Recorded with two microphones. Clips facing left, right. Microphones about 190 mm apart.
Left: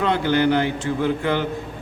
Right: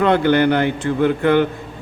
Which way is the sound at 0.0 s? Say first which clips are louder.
Right 5 dB; 60° right (ahead or behind).